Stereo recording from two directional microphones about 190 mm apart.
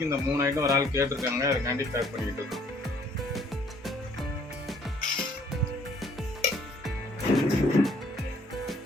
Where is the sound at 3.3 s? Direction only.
Centre (ahead or behind).